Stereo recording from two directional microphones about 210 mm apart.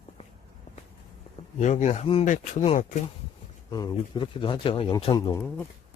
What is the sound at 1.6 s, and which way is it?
Speech, 35° left (ahead or behind).